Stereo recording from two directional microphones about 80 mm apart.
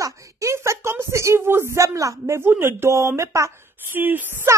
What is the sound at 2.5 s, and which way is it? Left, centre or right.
Speech, right.